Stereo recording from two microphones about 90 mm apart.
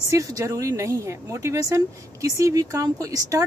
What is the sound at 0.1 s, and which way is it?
Speech, 40° right (ahead or behind).